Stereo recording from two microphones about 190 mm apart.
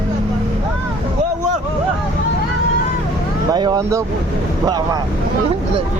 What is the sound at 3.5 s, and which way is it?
Speech, 20° right (ahead or behind).